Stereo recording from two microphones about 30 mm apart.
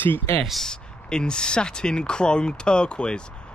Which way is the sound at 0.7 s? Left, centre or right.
Left.